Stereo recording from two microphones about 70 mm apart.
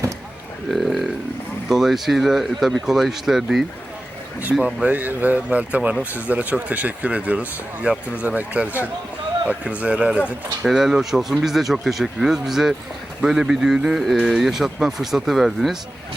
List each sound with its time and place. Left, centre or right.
0.7 s a sound: centre
1.7 s speech: centre
4.6 s a man's voice: right
10.6 s a man's voice: centre